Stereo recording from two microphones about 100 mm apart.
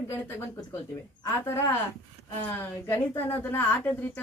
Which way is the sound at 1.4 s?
25° left (ahead or behind).